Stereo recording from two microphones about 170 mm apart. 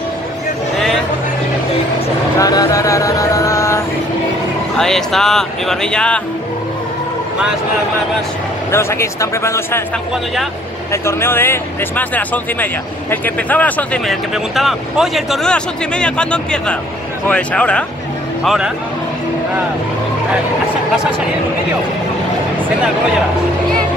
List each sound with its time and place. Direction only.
2.4 s a sound: 20° left (ahead or behind)
4.7 s speech: 5° left (ahead or behind)
8.7 s speech: 15° left (ahead or behind)
10.9 s speech: 15° left (ahead or behind); by 18.7 s centre (ahead or behind)